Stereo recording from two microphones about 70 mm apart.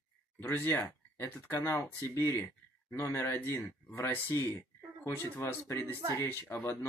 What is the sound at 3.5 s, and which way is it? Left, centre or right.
Speech, left.